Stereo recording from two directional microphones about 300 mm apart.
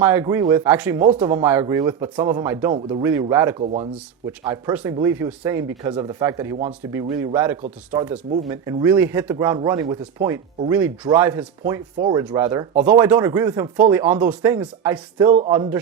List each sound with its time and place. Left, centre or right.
0.0 s speech: centre
3.6 s speech: right
3.9 s speech: centre
15.3 s speech: centre
15.5 s speech: centre